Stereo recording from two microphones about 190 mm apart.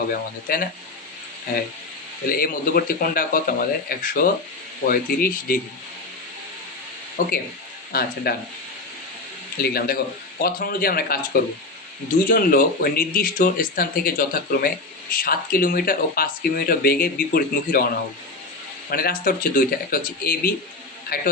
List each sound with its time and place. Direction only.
0.1 s speech: 50° left (ahead or behind)
2.3 s speech: 50° left (ahead or behind)
7.2 s speech: 45° left (ahead or behind)
9.6 s speech: 55° left (ahead or behind)
12.3 s speech: 50° left (ahead or behind)
18.9 s speech: 50° left (ahead or behind)